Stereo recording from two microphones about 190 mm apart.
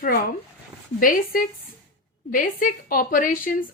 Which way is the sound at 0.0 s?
50° left (ahead or behind).